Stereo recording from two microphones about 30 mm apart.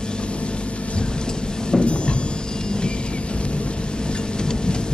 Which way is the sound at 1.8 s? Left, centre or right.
Left.